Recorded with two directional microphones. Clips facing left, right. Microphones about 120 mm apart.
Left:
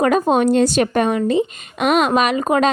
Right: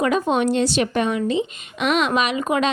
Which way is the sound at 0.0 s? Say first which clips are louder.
Left 4 dB; 45° left (ahead or behind).